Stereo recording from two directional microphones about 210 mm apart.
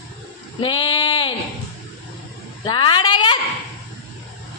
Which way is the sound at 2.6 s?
25° left (ahead or behind).